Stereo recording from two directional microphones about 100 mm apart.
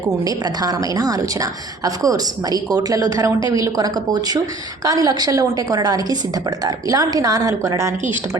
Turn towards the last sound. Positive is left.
turn(degrees=-35)  # may be behind; listen again after turning